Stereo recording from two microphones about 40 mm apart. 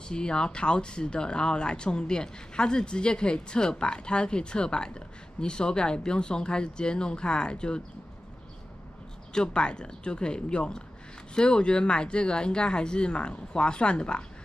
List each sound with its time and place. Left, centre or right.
0.1 s speech: left
9.3 s speech: left